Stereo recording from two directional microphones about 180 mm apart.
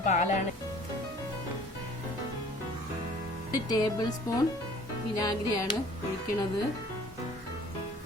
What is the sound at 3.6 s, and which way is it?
Speech, 20° left (ahead or behind).